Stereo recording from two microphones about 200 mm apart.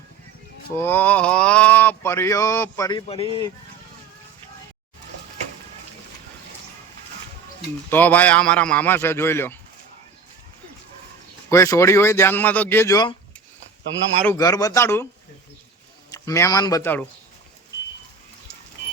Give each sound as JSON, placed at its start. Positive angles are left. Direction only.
{"t": 0.8, "sound": "mantra", "side_deg": 10}
{"t": 7.9, "sound": "mantra", "side_deg": 10}
{"t": 11.5, "sound": "mantra", "side_deg": 15}
{"t": 14.3, "sound": "mantra", "side_deg": 20}
{"t": 16.1, "sound": "mantra", "side_deg": 15}